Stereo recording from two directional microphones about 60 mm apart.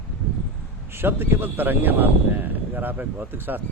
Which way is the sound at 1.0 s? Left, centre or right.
Right.